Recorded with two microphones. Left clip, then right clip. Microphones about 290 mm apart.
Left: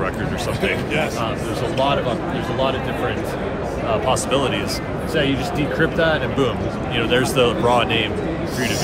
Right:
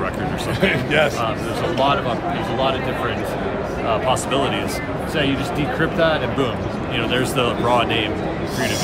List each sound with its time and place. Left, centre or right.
0.6 s speech: right
4.1 s speech: centre